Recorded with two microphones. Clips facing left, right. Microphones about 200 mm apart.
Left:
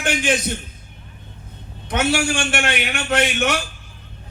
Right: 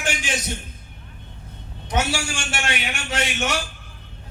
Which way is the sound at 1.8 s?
60° left (ahead or behind).